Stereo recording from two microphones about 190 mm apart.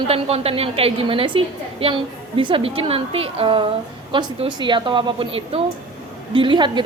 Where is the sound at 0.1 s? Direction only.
30° right (ahead or behind).